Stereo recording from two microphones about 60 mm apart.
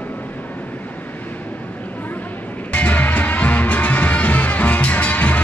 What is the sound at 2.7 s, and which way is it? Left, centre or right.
Music, left.